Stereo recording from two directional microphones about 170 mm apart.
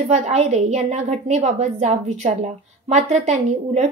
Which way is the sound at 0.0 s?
45° right (ahead or behind).